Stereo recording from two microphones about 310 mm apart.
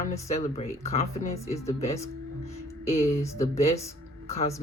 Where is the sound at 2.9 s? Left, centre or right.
Centre.